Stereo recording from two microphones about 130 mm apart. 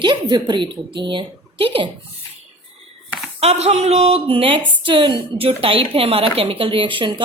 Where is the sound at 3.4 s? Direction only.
55° right (ahead or behind).